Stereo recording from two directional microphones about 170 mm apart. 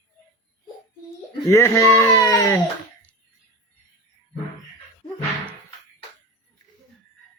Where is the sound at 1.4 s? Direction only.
15° left (ahead or behind).